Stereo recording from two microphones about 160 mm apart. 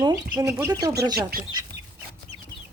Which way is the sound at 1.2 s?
75° right (ahead or behind).